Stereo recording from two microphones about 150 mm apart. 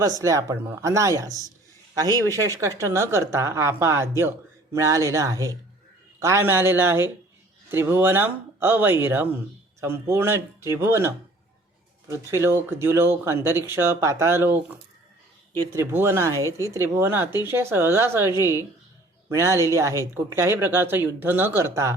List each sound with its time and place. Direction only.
0.0 s a woman's voice: 20° right (ahead or behind)